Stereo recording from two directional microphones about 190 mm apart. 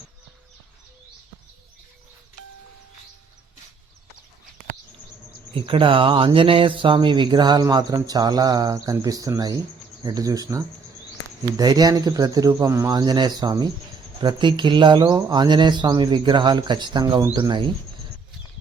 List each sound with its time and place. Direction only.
5.5 s speech: 25° right (ahead or behind)